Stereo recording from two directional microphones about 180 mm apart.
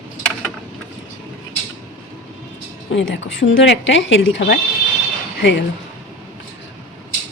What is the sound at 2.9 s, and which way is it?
A woman's voice, 90° left.